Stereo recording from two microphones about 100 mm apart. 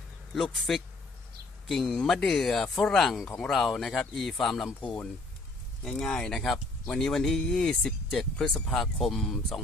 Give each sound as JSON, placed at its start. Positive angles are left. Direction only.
{"t": 0.3, "sound": "speech", "side_deg": 0}
{"t": 1.9, "sound": "speech", "side_deg": 10}
{"t": 5.9, "sound": "speech", "side_deg": 5}